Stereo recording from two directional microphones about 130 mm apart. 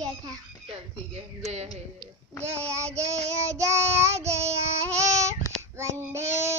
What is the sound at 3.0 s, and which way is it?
Speech, 55° right (ahead or behind).